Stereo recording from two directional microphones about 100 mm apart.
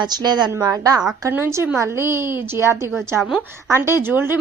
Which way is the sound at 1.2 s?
25° right (ahead or behind).